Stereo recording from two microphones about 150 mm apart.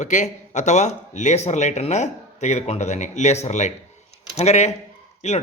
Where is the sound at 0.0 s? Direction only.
55° left (ahead or behind).